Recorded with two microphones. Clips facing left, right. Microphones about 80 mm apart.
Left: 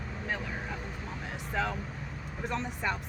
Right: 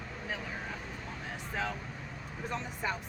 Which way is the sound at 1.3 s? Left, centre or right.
Left.